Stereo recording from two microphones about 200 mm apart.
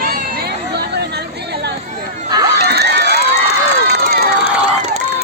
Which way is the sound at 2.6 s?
55° right (ahead or behind).